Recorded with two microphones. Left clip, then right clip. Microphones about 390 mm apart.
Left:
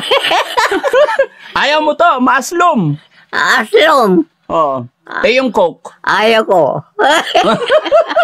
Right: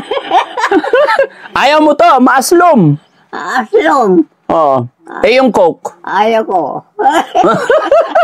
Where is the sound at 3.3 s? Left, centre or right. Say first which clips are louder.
Left 2 dB; left.